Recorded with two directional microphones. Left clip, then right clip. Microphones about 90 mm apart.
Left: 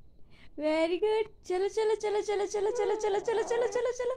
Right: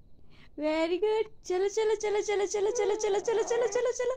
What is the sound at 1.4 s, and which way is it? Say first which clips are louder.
A woman's voice: right 1 dB; 20° right (ahead or behind).